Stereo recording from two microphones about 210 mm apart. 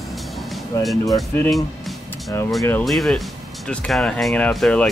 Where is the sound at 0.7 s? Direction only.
15° left (ahead or behind).